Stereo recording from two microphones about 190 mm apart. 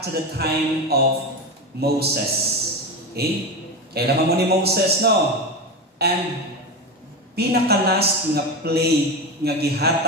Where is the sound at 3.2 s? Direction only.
55° right (ahead or behind).